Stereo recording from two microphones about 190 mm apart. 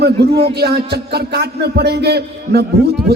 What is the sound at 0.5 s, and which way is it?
A man's voice, 60° right (ahead or behind).